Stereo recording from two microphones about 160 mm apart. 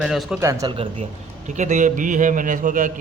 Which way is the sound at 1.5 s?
50° right (ahead or behind).